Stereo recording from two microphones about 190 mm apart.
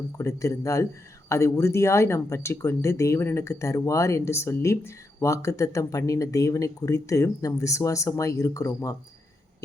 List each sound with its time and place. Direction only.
0.2 s speech: 15° left (ahead or behind)